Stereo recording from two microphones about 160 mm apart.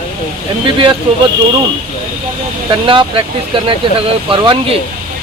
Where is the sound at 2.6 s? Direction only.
30° right (ahead or behind).